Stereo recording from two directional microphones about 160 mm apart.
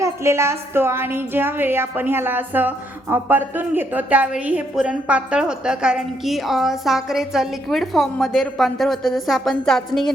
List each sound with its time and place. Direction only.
0.0 s a woman's voice: 15° right (ahead or behind); by 10.1 s centre (ahead or behind)